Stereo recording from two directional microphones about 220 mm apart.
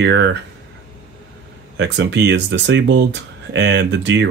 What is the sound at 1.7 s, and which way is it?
Speech, 55° right (ahead or behind).